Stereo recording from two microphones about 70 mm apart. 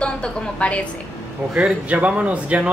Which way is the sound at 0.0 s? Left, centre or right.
Centre.